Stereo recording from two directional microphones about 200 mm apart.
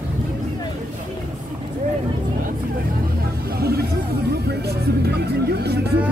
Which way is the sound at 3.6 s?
50° right (ahead or behind).